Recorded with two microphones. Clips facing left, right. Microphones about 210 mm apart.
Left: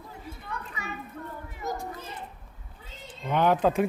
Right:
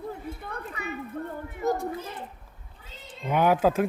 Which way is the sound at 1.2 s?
50° right (ahead or behind).